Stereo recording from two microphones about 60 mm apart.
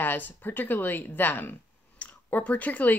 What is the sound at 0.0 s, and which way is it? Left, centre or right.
Speech, left.